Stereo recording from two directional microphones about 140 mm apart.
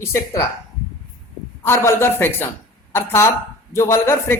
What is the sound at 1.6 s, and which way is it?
A man's voice, 20° left (ahead or behind).